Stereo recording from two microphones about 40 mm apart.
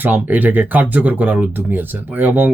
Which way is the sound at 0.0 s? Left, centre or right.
Right.